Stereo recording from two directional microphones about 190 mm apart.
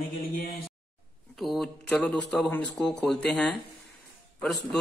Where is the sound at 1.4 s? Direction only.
Centre (ahead or behind).